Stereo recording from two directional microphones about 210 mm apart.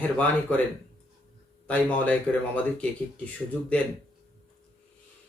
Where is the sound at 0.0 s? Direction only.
10° left (ahead or behind).